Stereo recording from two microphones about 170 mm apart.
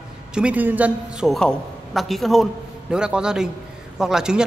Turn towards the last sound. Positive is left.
turn(degrees=-5)  # may be behind; listen again after turning